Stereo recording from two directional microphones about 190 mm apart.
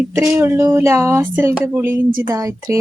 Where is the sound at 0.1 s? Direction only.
15° right (ahead or behind).